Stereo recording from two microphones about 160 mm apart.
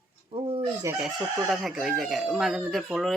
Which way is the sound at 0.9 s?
15° right (ahead or behind).